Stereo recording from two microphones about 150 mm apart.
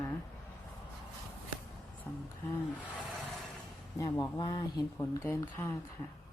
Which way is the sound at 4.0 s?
25° left (ahead or behind).